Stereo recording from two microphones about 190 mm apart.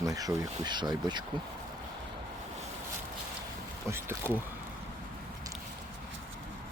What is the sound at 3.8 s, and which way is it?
Speech, 10° right (ahead or behind).